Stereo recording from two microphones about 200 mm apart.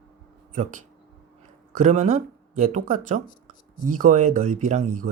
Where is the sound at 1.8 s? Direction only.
35° right (ahead or behind).